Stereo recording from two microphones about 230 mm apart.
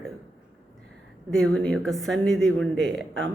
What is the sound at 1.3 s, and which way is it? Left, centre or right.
Speech, centre.